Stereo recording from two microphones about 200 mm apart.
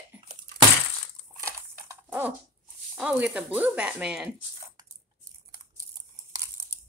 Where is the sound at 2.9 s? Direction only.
5° right (ahead or behind).